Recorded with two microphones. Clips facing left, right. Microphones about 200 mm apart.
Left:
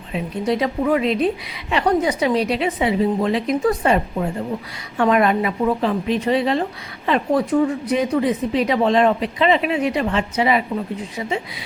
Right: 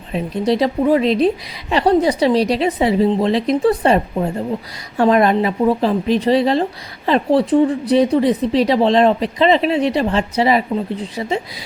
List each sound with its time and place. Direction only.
0.1 s speech: 35° right (ahead or behind)